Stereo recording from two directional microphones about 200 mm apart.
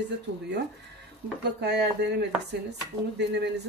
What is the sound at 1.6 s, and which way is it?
Speech, 55° right (ahead or behind).